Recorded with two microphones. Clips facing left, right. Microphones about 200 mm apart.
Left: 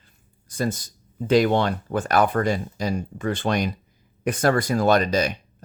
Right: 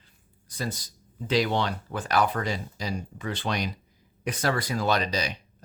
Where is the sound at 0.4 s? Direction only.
50° left (ahead or behind).